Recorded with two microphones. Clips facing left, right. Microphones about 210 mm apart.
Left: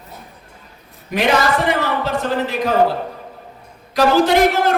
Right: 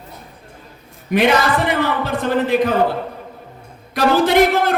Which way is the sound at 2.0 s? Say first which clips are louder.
Right 1 dB; 55° right (ahead or behind).